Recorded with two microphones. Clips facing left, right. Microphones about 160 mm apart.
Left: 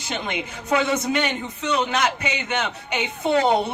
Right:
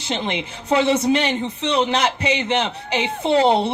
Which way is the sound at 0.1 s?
30° right (ahead or behind).